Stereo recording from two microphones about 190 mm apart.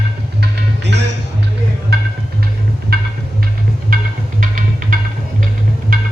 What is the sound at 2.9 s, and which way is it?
Music, 55° right (ahead or behind).